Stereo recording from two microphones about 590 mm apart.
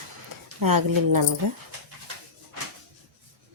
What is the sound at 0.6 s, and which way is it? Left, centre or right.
Speech, right.